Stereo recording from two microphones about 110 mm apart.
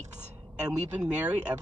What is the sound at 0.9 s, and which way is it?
Speech, 10° right (ahead or behind).